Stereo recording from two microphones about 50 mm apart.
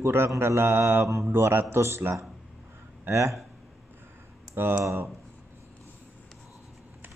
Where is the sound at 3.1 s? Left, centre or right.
Right.